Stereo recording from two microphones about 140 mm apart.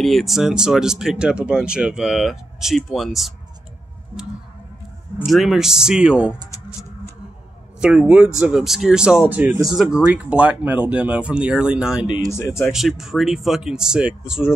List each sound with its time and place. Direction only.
0.0 s speech: centre (ahead or behind)
5.2 s speech: centre (ahead or behind)
7.8 s speech: 5° right (ahead or behind)
12.3 s speech: 20° left (ahead or behind)
12.7 s speech: centre (ahead or behind)